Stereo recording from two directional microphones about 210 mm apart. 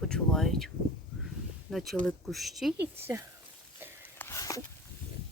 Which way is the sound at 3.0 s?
15° right (ahead or behind).